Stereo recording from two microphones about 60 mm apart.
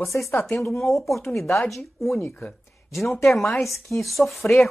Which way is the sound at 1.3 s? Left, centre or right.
Centre.